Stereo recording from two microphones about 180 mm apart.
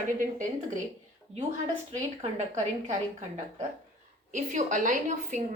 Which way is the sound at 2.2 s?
40° right (ahead or behind).